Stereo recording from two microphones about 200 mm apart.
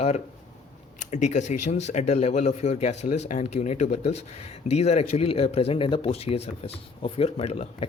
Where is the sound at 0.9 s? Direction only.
35° left (ahead or behind).